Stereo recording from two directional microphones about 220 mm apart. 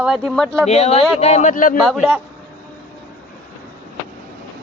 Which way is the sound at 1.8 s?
Centre (ahead or behind).